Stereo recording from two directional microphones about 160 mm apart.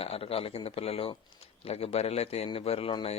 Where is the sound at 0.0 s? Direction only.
35° left (ahead or behind).